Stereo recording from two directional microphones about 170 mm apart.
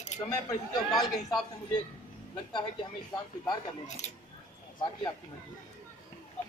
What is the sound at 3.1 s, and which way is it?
Speech, 25° left (ahead or behind).